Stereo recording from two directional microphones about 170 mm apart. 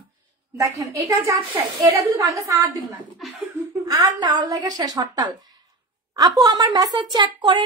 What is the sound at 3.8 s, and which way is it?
Speech, 20° right (ahead or behind).